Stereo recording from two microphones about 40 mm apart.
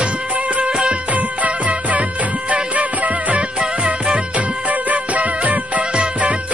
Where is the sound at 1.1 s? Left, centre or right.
Right.